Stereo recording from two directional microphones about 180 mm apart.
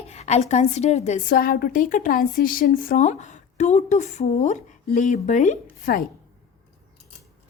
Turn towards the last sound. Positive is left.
turn(degrees=45)  # may be behind; listen again after turning